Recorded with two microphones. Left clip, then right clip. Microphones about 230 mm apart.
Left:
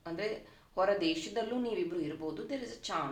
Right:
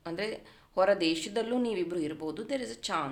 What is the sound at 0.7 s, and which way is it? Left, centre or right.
Speech, right.